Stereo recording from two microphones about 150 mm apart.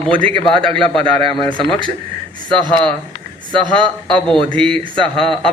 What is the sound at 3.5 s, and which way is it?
Speech, 30° right (ahead or behind).